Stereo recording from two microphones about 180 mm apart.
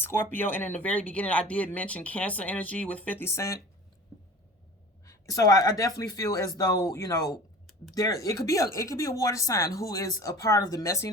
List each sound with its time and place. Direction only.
0.0 s speech: 10° left (ahead or behind)
5.0 s speech: 20° left (ahead or behind)